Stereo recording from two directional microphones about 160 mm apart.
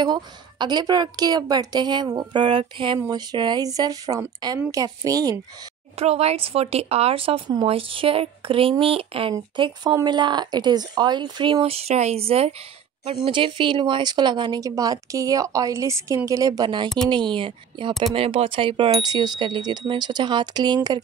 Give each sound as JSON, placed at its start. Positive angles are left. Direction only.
{"t": 0.0, "sound": "speech", "side_deg": -25}
{"t": 5.9, "sound": "speech", "side_deg": -40}
{"t": 9.3, "sound": "speech", "side_deg": -25}